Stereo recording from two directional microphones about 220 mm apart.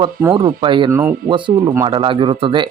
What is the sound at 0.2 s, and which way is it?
Speech, 15° right (ahead or behind).